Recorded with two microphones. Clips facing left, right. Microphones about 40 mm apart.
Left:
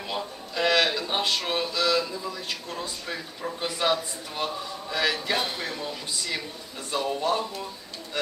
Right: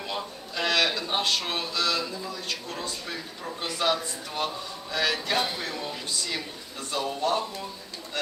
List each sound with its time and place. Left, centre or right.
0.1 s speech: centre